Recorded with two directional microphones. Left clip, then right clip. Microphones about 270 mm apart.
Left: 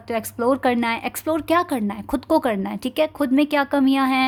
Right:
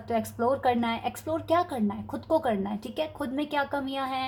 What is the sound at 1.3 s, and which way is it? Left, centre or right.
Speech, left.